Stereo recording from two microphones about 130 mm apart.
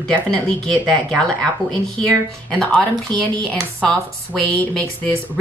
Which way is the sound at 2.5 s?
10° left (ahead or behind).